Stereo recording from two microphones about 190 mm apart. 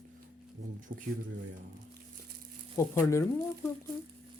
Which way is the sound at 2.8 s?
15° left (ahead or behind).